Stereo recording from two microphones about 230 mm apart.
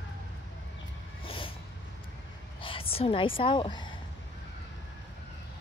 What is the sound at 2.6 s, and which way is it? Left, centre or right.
A woman's voice, left.